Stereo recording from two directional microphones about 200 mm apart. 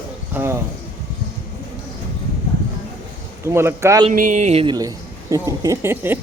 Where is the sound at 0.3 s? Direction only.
10° right (ahead or behind).